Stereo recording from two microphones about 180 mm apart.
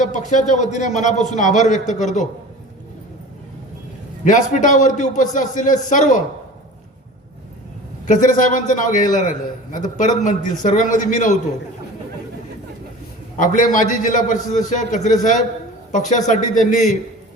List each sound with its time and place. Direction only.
0.0 s a man's voice: 40° left (ahead or behind)
4.2 s a man's voice: 45° left (ahead or behind)
8.0 s a man's voice: 45° left (ahead or behind)
13.3 s a man's voice: 45° left (ahead or behind)